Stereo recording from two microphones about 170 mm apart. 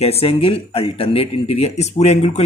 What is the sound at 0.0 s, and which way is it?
A man's voice, 35° left (ahead or behind).